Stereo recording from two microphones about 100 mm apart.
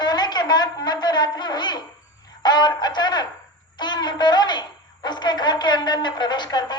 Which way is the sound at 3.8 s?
45° left (ahead or behind).